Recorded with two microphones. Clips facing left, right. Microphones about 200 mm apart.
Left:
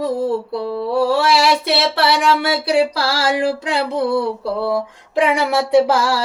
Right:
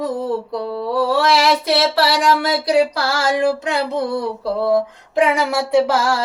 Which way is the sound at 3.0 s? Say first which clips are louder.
Right 1 dB; 35° left (ahead or behind).